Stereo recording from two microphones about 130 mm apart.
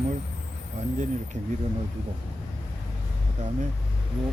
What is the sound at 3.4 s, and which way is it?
Speech, 65° right (ahead or behind).